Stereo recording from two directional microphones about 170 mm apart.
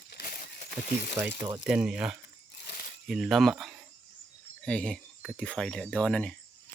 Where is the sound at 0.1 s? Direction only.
55° left (ahead or behind).